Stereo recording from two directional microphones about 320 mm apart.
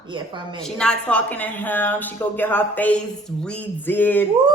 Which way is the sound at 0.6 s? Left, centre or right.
Centre.